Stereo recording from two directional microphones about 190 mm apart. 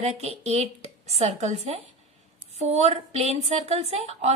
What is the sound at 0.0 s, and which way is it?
A woman's voice, 35° right (ahead or behind).